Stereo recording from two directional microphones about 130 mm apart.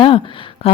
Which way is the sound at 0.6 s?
45° left (ahead or behind).